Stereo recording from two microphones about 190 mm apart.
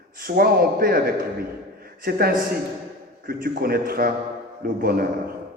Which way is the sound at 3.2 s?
50° right (ahead or behind).